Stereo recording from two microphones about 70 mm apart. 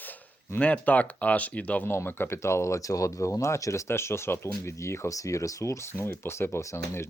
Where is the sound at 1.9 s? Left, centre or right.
Left.